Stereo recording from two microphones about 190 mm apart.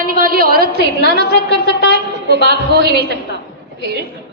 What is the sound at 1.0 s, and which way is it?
Speech, 65° left (ahead or behind).